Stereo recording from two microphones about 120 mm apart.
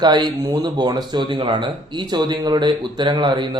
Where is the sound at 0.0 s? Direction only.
35° right (ahead or behind).